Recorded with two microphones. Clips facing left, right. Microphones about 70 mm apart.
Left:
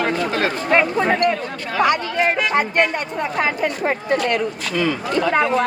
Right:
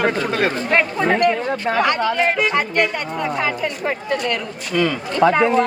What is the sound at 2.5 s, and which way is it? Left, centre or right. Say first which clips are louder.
Speech: left 1 dB; left.